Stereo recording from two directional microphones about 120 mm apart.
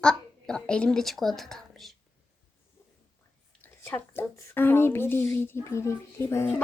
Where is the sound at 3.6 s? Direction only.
15° left (ahead or behind).